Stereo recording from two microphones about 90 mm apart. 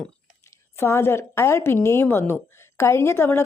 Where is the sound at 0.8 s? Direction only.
30° left (ahead or behind).